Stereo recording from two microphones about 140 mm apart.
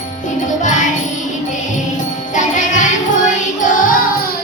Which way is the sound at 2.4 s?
65° left (ahead or behind).